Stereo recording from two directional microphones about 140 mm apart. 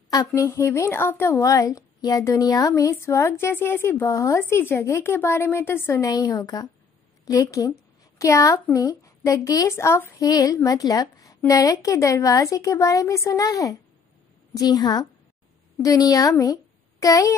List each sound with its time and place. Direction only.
0.1 s speech: 20° left (ahead or behind)